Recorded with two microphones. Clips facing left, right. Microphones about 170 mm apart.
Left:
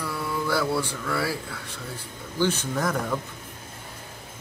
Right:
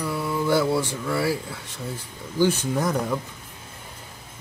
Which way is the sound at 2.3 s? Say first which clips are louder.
Right 4 dB; 15° right (ahead or behind).